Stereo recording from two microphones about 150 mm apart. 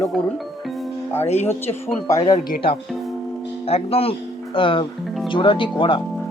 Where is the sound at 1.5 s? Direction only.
20° left (ahead or behind).